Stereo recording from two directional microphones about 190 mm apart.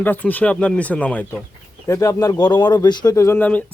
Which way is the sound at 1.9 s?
15° left (ahead or behind).